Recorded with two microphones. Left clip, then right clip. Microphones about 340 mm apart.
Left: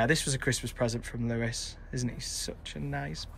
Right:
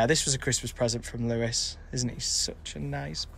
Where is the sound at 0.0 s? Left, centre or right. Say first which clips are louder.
Right 3 dB; centre.